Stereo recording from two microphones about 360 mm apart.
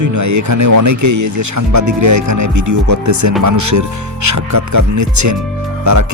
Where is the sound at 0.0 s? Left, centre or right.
Right.